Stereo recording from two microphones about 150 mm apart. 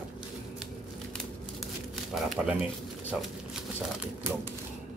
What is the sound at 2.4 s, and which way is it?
Speech, 5° right (ahead or behind).